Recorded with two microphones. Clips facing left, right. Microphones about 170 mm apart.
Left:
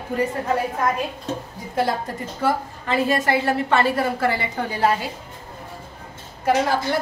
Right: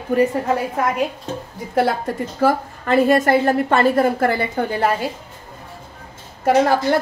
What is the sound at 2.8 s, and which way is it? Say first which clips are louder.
A woman's voice: right 6 dB; 50° right (ahead or behind).